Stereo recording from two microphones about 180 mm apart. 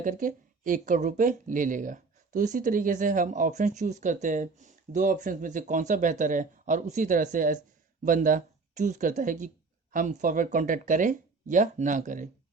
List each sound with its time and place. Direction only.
0.0 s speech: 45° right (ahead or behind)